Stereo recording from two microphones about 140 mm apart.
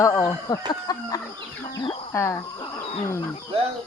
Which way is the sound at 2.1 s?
20° left (ahead or behind).